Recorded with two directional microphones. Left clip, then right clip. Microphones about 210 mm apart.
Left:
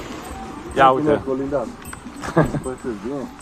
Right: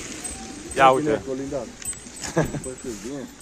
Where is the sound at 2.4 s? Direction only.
Centre (ahead or behind).